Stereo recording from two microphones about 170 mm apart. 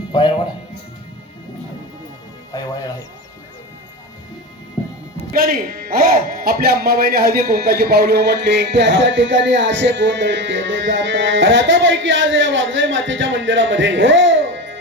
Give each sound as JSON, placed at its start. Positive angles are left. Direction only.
{"t": 0.1, "sound": "speech", "side_deg": 25}
{"t": 2.5, "sound": "speech", "side_deg": 20}
{"t": 5.3, "sound": "speech", "side_deg": -60}